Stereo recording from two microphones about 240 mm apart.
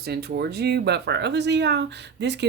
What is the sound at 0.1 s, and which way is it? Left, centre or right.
Speech, right.